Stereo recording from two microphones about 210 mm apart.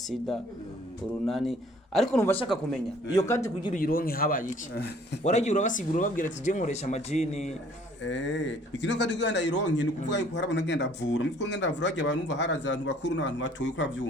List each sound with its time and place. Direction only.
1.3 s a man's voice: centre (ahead or behind)
3.8 s speech: 45° left (ahead or behind)
8.0 s speech: 60° left (ahead or behind)